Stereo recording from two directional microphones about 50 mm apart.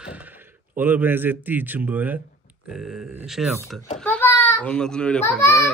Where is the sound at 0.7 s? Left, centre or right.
Right.